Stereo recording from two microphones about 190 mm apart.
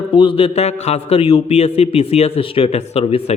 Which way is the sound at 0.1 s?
30° left (ahead or behind).